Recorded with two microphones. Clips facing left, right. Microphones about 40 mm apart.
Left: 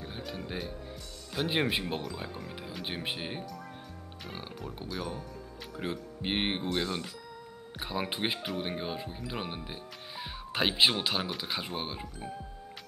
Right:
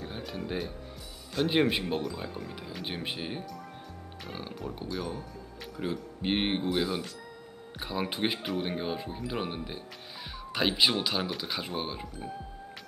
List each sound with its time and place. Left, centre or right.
0.0 s music: centre
1.3 s speech: centre
6.7 s speech: centre
7.8 s speech: centre
10.8 s speech: left
11.2 s speech: centre